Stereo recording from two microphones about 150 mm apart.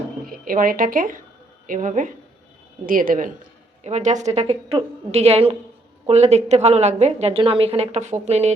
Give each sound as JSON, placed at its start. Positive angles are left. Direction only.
{"t": 0.3, "sound": "speech", "side_deg": -70}
{"t": 3.8, "sound": "a woman's voice", "side_deg": -50}